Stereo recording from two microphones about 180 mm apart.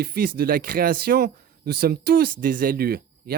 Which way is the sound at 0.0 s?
60° right (ahead or behind).